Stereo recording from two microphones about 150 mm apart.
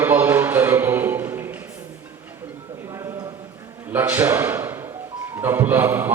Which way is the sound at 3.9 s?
15° right (ahead or behind).